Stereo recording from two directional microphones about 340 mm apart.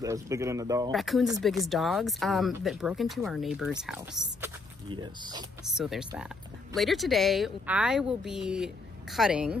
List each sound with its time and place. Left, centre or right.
0.0 s speech: centre
4.4 s speech: centre
5.8 s speech: centre